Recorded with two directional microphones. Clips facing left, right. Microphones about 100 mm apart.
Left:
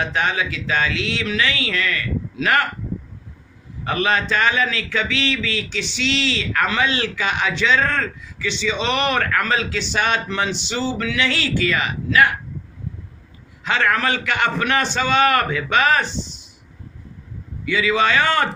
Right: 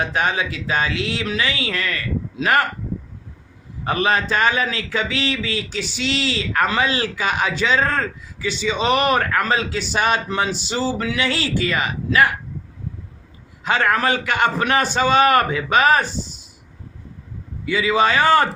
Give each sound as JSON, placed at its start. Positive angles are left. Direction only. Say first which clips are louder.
{"t": 0.0, "sound": "a man's voice", "louder": "right 1 dB", "side_deg": -35}
{"t": 3.8, "sound": "a man's voice", "louder": "right 1 dB", "side_deg": -35}
{"t": 13.7, "sound": "a man's voice", "louder": "right 1 dB", "side_deg": -35}
{"t": 17.7, "sound": "a man's voice", "louder": "right 1 dB", "side_deg": -35}